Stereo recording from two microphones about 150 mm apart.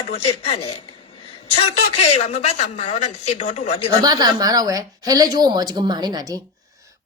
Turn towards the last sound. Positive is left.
turn(degrees=-25)  # may be behind; listen again after turning